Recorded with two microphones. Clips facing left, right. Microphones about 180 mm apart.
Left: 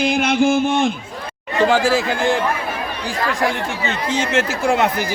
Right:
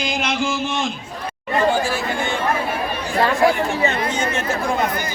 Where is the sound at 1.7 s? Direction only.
90° left.